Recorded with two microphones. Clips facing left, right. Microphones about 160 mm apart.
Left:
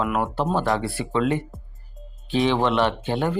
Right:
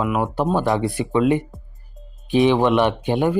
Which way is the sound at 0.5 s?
20° right (ahead or behind).